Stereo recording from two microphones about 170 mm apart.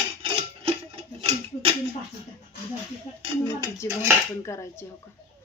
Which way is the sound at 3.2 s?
30° right (ahead or behind).